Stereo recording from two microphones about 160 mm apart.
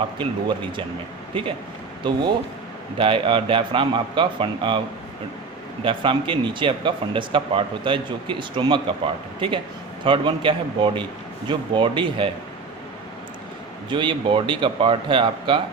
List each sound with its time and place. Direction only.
0.2 s speech: 30° right (ahead or behind)
3.0 s speech: 30° right (ahead or behind)
5.8 s speech: 35° right (ahead or behind)
13.9 s speech: 30° right (ahead or behind)